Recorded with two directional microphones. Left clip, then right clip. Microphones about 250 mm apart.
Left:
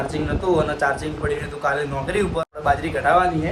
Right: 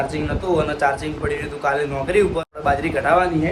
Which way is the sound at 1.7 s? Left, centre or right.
Left.